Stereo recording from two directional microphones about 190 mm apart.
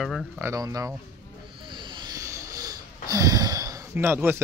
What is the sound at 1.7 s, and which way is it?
Wheeze, 25° right (ahead or behind).